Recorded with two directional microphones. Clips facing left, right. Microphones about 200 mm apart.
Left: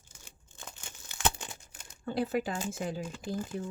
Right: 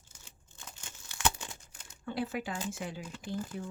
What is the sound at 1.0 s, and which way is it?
Tearing, 15° left (ahead or behind).